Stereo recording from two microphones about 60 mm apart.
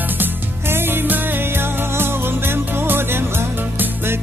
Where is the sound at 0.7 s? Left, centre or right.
Right.